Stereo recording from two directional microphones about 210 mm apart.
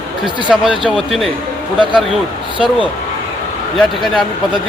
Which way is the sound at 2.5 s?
25° right (ahead or behind).